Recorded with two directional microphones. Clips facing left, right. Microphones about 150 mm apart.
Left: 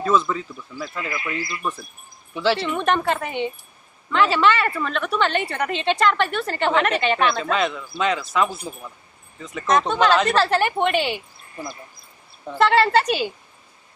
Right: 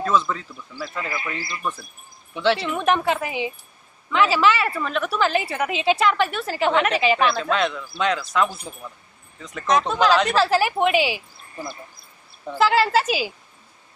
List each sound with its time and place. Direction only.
0.0 s a woman's voice: centre (ahead or behind)
1.4 s speech: 30° right (ahead or behind)
2.3 s a woman's voice: centre (ahead or behind)
12.5 s a woman's voice: centre (ahead or behind)